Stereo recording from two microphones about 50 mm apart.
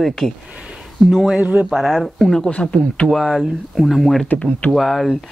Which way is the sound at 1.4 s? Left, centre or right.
Right.